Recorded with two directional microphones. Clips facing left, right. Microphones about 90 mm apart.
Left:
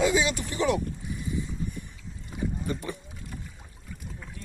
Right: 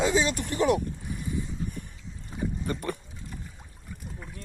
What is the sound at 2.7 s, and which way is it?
Speech, 50° right (ahead or behind).